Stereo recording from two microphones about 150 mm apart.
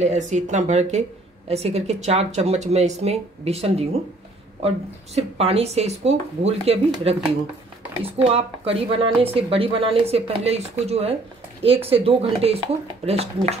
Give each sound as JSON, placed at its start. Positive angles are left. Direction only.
{"t": 0.0, "sound": "speech", "side_deg": -50}
{"t": 8.0, "sound": "speech", "side_deg": -40}